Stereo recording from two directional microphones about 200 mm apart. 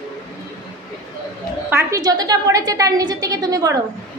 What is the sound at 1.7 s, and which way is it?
A woman's voice, 15° right (ahead or behind).